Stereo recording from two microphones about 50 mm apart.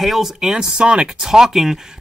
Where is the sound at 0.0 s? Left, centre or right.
Centre.